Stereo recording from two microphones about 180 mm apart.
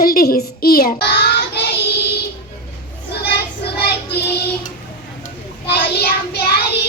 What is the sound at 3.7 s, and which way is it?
Child singing, 65° left (ahead or behind).